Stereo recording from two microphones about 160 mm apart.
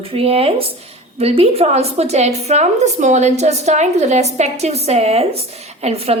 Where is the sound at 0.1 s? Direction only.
35° right (ahead or behind).